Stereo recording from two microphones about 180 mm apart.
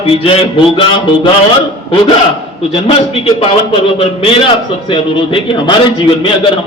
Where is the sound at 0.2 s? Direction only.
30° left (ahead or behind).